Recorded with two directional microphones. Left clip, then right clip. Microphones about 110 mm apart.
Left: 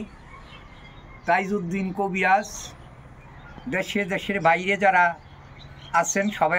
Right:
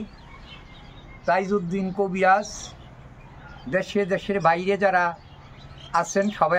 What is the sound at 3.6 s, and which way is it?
Speech, 30° right (ahead or behind).